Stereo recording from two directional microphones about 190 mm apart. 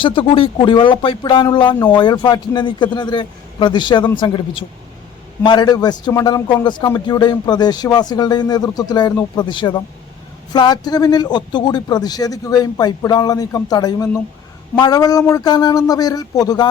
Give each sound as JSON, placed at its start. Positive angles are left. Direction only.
{"t": 0.0, "sound": "a man's voice", "side_deg": 25}